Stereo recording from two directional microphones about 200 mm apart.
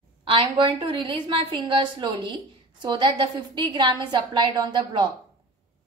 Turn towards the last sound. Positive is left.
turn(degrees=-25)  # may be behind; listen again after turning